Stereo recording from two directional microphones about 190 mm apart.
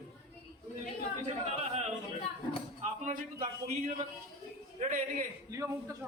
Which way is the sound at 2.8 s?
40° right (ahead or behind).